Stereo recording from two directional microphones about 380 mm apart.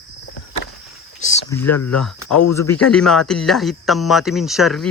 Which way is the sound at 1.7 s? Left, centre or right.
Left.